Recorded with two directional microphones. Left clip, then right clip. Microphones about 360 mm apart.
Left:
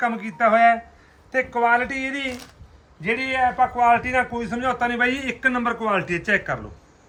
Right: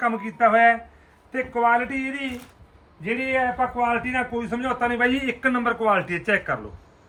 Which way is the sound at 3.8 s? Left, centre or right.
Centre.